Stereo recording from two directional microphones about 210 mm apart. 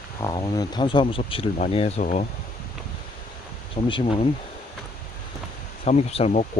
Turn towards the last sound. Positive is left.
turn(degrees=30)  # may be behind; listen again after turning